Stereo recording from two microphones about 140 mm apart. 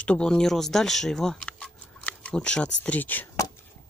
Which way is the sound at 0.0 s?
5° left (ahead or behind).